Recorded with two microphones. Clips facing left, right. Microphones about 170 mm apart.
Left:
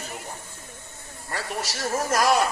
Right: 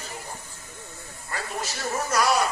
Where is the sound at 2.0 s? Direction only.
45° left (ahead or behind).